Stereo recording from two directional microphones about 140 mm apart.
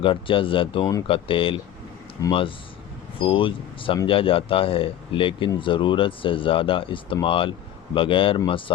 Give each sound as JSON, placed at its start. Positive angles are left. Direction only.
{"t": 0.0, "sound": "speech", "side_deg": 40}
{"t": 2.2, "sound": "speech", "side_deg": 25}
{"t": 3.2, "sound": "speech", "side_deg": 40}